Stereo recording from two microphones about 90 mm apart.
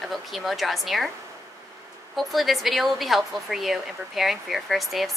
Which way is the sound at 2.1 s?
Centre (ahead or behind).